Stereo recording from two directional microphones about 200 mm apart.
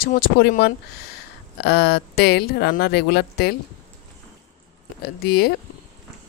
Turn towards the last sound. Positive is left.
turn(degrees=50)  # may be behind; listen again after turning